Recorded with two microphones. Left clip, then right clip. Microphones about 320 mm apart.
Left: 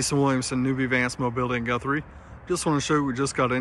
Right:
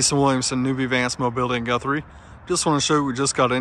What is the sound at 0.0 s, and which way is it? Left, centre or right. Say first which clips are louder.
Speech: right 4 dB; centre.